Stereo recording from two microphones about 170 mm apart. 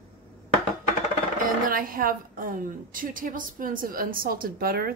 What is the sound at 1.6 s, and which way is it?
A woman's voice, 55° right (ahead or behind).